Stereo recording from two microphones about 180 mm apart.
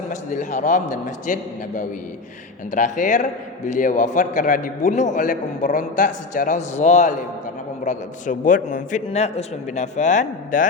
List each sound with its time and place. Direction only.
0.1 s a man's voice: 45° left (ahead or behind)
2.7 s a man's voice: 45° left (ahead or behind)